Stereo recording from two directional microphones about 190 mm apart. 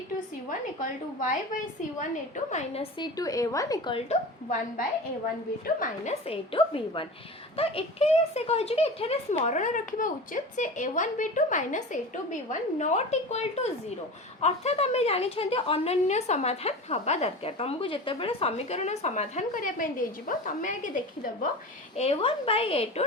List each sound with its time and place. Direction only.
2.0 s a woman's voice: 40° left (ahead or behind)
3.0 s speech: 20° left (ahead or behind)
3.9 s a woman's voice: 35° left (ahead or behind)
5.6 s a woman's voice: 45° left (ahead or behind)
6.2 s a woman's voice: 30° left (ahead or behind)
21.9 s a woman's voice: 35° left (ahead or behind)